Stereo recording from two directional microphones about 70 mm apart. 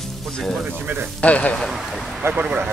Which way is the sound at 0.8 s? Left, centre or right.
Right.